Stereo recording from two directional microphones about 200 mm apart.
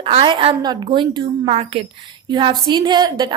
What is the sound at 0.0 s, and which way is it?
A woman's voice, 25° right (ahead or behind).